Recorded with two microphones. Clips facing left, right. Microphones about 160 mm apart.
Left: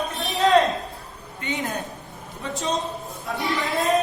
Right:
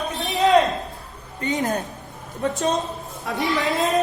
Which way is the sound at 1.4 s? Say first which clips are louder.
Right 5 dB; 40° right (ahead or behind).